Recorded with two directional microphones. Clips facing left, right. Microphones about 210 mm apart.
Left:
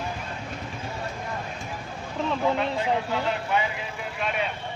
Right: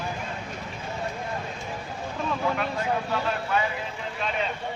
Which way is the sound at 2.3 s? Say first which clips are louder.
Left 3 dB; 20° left (ahead or behind).